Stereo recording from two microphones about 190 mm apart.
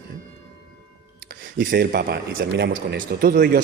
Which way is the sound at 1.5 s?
55° right (ahead or behind).